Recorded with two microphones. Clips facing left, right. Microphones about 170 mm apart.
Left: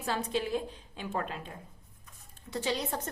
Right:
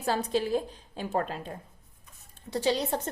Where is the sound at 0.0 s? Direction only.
40° right (ahead or behind).